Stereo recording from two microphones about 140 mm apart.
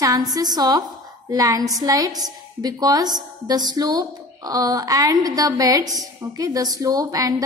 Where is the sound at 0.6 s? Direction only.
30° right (ahead or behind).